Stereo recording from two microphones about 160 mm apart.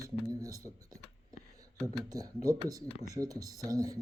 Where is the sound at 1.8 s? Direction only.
20° right (ahead or behind).